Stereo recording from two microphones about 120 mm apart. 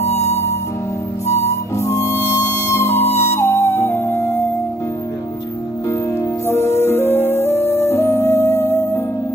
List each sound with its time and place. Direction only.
0.0 s music: 60° left (ahead or behind)
1.8 s music: 20° left (ahead or behind)
6.4 s music: 20° left (ahead or behind)